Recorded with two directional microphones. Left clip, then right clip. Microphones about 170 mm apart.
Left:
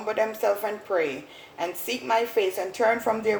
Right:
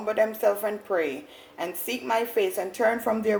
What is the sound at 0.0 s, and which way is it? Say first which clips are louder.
A woman's voice: right 2 dB; 35° right (ahead or behind).